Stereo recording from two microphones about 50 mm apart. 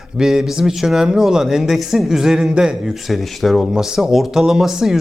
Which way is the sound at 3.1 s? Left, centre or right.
Centre.